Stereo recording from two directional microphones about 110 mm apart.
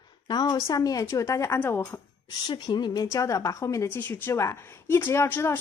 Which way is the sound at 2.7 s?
40° left (ahead or behind).